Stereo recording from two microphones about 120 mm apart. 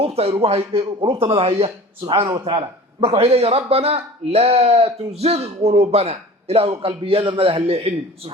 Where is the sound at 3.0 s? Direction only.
55° right (ahead or behind).